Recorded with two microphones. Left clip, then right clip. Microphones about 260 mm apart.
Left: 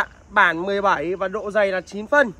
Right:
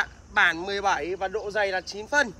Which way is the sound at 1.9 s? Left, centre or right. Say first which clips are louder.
Left 4 dB; left.